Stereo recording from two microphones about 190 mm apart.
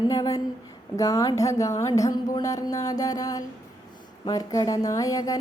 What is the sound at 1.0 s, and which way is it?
Music, 15° left (ahead or behind).